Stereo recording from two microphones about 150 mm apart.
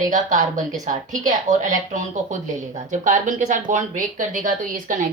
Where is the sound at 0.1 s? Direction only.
55° right (ahead or behind).